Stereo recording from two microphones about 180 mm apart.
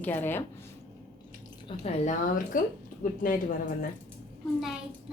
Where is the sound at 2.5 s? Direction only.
50° left (ahead or behind).